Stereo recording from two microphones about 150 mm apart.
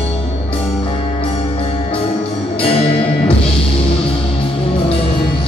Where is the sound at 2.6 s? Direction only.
40° left (ahead or behind).